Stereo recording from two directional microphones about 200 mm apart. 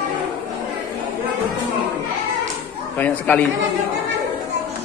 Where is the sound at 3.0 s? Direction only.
10° left (ahead or behind).